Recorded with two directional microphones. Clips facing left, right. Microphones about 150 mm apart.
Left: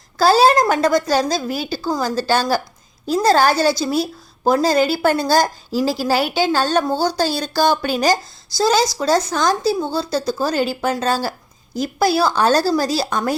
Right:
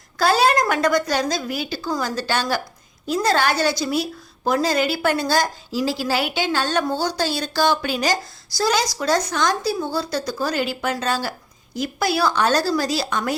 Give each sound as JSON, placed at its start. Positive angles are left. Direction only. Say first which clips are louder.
{"t": 0.2, "sound": "speech", "louder": "left 5 dB", "side_deg": 30}
{"t": 8.5, "sound": "a woman's voice", "louder": "left 4 dB", "side_deg": 25}